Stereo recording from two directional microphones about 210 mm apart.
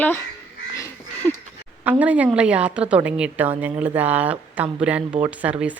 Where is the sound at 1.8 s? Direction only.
10° right (ahead or behind).